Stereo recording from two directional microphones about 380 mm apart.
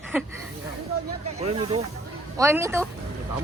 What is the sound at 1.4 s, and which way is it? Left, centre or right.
Speech, centre.